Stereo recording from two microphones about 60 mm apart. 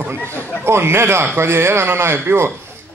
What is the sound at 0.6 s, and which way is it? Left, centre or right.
Speech, right.